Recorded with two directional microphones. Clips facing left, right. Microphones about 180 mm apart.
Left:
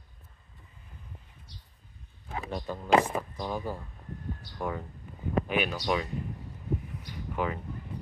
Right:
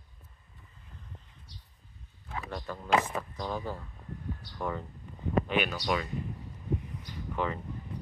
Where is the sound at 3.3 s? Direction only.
10° left (ahead or behind).